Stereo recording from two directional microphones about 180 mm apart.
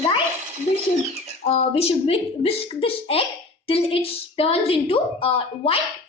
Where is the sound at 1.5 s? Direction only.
35° left (ahead or behind).